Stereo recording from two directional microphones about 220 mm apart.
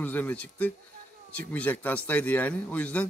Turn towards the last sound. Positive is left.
turn(degrees=5)  # may be behind; listen again after turning